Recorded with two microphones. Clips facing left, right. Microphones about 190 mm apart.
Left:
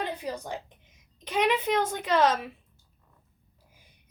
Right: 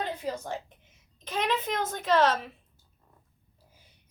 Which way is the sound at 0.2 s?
15° left (ahead or behind).